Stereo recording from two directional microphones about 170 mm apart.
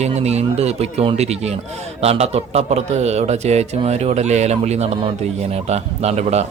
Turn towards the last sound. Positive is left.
turn(degrees=-40)  # may be behind; listen again after turning